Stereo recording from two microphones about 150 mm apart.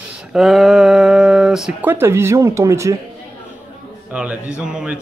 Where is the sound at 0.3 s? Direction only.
Centre (ahead or behind).